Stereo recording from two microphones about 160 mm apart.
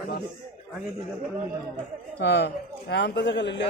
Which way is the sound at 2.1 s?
90° left.